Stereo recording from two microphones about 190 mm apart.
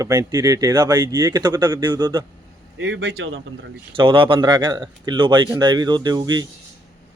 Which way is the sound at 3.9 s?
25° right (ahead or behind).